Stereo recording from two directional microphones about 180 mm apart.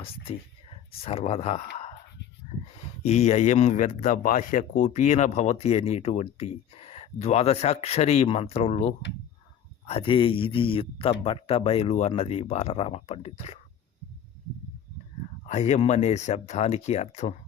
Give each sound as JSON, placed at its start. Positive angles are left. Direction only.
{"t": 1.0, "sound": "speech", "side_deg": 35}
{"t": 3.0, "sound": "speech", "side_deg": 35}
{"t": 9.8, "sound": "speech", "side_deg": 30}
{"t": 15.4, "sound": "speech", "side_deg": 40}